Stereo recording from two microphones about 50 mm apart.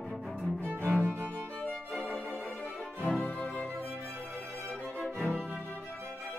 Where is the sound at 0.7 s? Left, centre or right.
Right.